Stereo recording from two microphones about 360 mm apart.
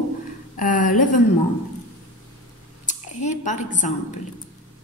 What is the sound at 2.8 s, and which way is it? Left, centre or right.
Speech, centre.